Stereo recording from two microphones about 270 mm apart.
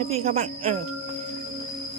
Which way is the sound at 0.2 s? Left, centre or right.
Right.